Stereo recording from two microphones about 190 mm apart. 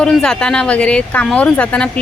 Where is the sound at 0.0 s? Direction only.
5° left (ahead or behind).